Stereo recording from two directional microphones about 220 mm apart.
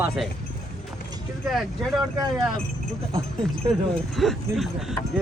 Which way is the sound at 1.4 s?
Centre (ahead or behind).